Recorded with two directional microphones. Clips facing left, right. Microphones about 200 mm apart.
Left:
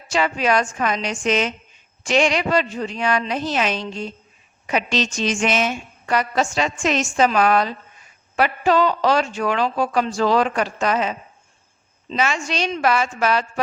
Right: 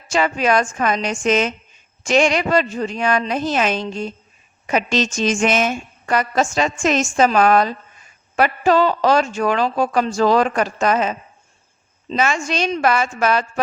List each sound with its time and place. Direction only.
0.1 s a woman's voice: 45° right (ahead or behind)